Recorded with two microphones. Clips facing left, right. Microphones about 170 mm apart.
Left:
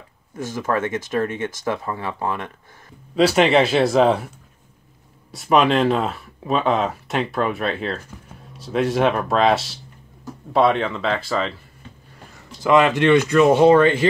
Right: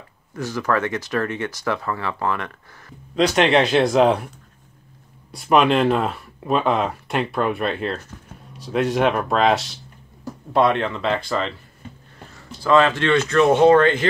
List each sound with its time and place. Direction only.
0.4 s speech: 25° left (ahead or behind)
3.2 s speech: 5° left (ahead or behind)
5.3 s speech: centre (ahead or behind)
12.6 s speech: 15° left (ahead or behind)